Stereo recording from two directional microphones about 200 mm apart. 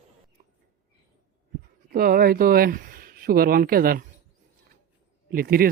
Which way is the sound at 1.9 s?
50° right (ahead or behind).